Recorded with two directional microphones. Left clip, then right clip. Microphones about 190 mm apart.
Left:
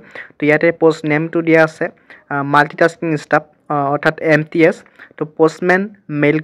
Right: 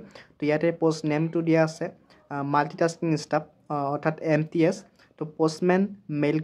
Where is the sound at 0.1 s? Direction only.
15° left (ahead or behind).